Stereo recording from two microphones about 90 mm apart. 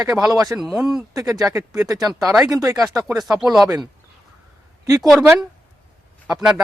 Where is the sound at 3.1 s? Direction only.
5° right (ahead or behind).